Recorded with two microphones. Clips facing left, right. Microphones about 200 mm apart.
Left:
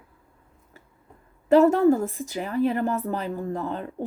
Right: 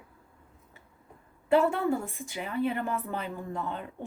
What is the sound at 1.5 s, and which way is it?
A woman's voice, 40° left (ahead or behind).